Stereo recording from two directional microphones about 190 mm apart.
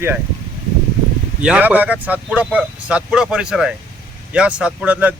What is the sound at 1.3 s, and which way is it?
Speech, 5° right (ahead or behind).